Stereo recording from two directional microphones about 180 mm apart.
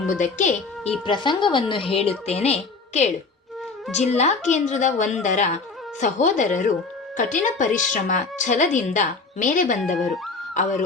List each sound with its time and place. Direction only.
0.1 s a woman's voice: 45° left (ahead or behind)
1.0 s a woman's voice: 25° left (ahead or behind); by 10.8 s 45° left (ahead or behind)